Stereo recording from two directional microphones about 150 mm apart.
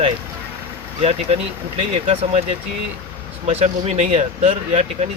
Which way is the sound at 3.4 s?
45° right (ahead or behind).